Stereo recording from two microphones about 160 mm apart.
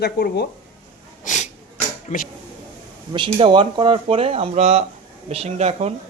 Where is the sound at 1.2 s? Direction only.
50° left (ahead or behind).